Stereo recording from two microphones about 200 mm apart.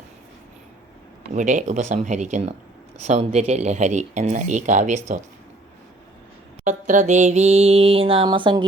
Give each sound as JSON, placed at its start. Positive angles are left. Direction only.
{"t": 1.3, "sound": "speech", "side_deg": -40}
{"t": 6.7, "sound": "speech", "side_deg": -40}